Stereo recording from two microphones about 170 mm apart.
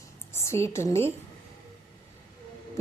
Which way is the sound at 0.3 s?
15° left (ahead or behind).